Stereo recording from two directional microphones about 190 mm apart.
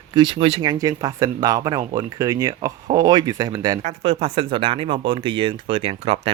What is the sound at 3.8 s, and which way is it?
Speech, 35° right (ahead or behind).